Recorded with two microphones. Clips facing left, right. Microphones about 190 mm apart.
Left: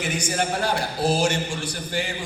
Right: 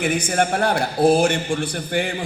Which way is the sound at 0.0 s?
55° right (ahead or behind).